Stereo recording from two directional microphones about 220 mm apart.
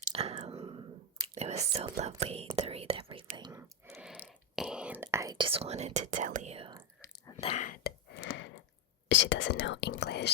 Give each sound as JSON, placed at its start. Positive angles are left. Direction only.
{"t": 0.0, "sound": "a sound", "side_deg": -25}
{"t": 1.4, "sound": "whispering", "side_deg": -30}
{"t": 3.9, "sound": "a sound", "side_deg": -5}
{"t": 4.3, "sound": "whispering", "side_deg": -5}
{"t": 7.0, "sound": "chewing", "side_deg": 15}
{"t": 7.4, "sound": "whispering", "side_deg": 35}
{"t": 9.0, "sound": "whispering", "side_deg": 55}